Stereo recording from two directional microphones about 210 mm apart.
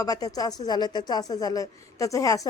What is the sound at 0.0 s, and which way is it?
A woman's voice, 15° left (ahead or behind).